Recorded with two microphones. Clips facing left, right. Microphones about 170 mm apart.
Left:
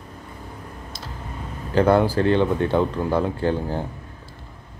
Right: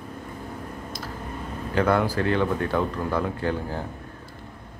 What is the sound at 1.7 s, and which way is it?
A man's voice, 30° left (ahead or behind).